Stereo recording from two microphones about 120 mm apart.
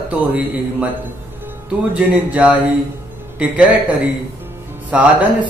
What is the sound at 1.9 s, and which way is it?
Speech, 10° right (ahead or behind).